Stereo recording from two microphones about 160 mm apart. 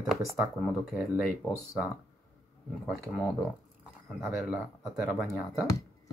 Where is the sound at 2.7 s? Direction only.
Centre (ahead or behind).